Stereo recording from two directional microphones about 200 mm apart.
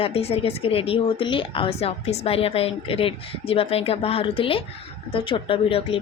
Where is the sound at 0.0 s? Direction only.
30° left (ahead or behind).